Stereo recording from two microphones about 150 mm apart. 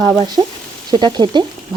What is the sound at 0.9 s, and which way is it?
Speech, 30° right (ahead or behind).